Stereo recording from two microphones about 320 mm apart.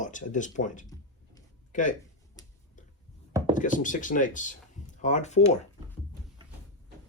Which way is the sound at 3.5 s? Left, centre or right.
Left.